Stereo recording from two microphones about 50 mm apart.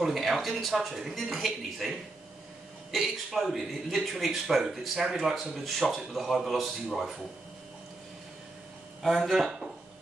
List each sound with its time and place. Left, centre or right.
0.0 s a man's voice: centre
9.0 s a man's voice: centre